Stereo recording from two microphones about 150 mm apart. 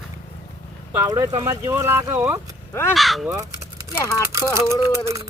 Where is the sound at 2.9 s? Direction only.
Centre (ahead or behind).